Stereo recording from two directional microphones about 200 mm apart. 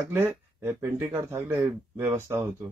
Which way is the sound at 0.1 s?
10° right (ahead or behind).